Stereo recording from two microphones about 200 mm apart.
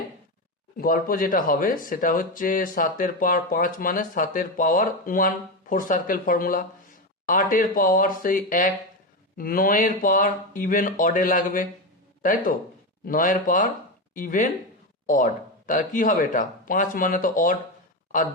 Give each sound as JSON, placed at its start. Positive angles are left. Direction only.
{"t": 0.8, "sound": "speech", "side_deg": 45}